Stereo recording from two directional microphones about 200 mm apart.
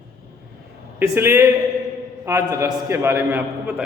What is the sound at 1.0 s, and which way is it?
A man's voice, 10° right (ahead or behind).